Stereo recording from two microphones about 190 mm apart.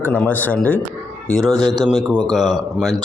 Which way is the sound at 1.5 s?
20° right (ahead or behind).